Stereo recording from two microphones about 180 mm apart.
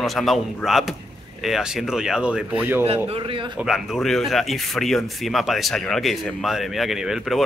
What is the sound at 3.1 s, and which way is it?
Speech, 30° right (ahead or behind).